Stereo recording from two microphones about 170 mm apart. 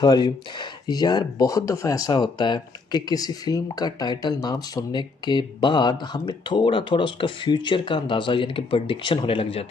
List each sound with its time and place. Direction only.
0.0 s speech: 25° left (ahead or behind)